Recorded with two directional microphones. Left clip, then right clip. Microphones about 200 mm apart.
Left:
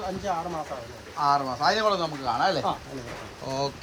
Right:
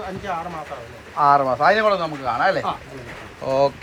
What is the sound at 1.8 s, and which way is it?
A man's voice, 25° left (ahead or behind).